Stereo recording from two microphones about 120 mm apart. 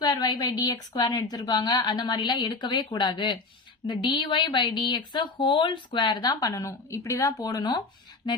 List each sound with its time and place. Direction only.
0.0 s a woman's voice: 35° left (ahead or behind)